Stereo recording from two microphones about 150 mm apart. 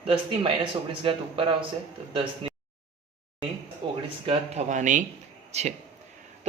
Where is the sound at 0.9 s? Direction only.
35° right (ahead or behind).